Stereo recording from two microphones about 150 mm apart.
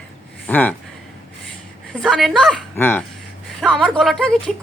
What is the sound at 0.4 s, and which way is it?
Speech, 10° left (ahead or behind).